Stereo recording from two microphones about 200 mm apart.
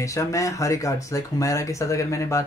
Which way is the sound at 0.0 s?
15° left (ahead or behind).